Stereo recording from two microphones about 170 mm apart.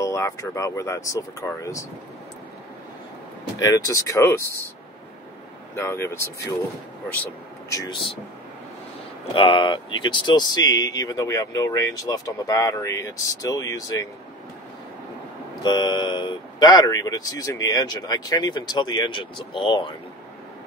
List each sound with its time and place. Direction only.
0.0 s speech: 15° left (ahead or behind)
3.5 s speech: 20° left (ahead or behind)
5.8 s speech: 15° left (ahead or behind)
7.7 s speech: 25° left (ahead or behind)
9.3 s speech: 30° left (ahead or behind)
15.6 s speech: 25° left (ahead or behind)